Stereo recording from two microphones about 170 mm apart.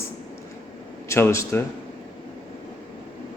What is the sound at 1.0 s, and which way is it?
Speech, 15° left (ahead or behind).